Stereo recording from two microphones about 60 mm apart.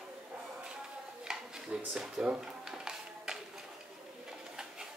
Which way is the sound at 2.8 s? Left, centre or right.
Centre.